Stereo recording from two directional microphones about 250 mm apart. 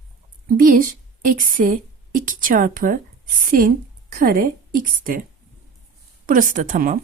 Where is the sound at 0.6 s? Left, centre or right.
Right.